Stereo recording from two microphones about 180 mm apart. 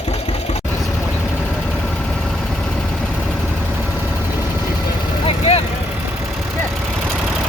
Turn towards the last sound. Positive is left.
turn(degrees=30)  # may be behind; listen again after turning